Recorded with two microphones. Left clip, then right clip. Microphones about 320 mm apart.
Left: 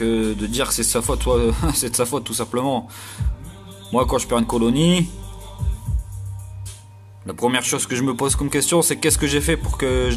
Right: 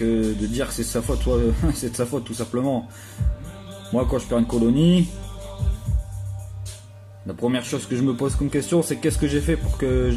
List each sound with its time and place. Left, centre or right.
0.0 s speech: left
3.9 s speech: left
7.2 s speech: left